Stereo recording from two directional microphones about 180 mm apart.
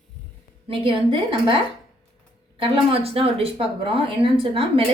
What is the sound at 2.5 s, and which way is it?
Speech, 30° right (ahead or behind).